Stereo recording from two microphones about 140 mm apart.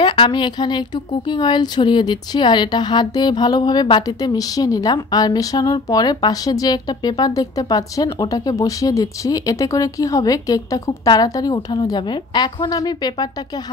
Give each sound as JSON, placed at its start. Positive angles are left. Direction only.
{"t": 0.0, "sound": "speech", "side_deg": 35}